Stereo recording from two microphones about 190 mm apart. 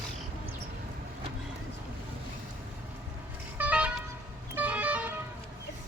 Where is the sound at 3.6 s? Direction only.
5° right (ahead or behind).